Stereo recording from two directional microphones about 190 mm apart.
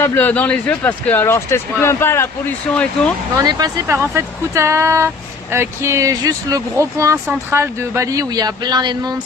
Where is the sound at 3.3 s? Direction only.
20° right (ahead or behind).